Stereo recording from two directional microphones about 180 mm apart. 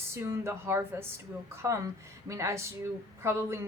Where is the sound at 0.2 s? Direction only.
15° right (ahead or behind).